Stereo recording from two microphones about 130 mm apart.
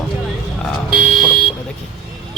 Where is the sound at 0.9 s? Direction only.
5° right (ahead or behind).